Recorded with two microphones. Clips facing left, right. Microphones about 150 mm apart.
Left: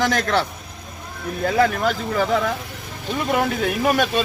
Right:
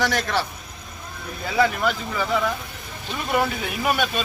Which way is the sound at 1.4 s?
50° left (ahead or behind).